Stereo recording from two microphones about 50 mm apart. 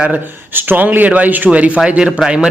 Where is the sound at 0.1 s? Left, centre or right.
Right.